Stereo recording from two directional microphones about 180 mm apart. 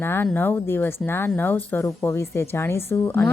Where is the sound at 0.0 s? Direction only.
10° left (ahead or behind).